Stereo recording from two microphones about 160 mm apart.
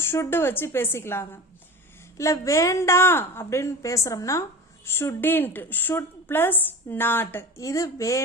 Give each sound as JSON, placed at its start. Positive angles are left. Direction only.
{"t": 0.0, "sound": "a woman's voice", "side_deg": 15}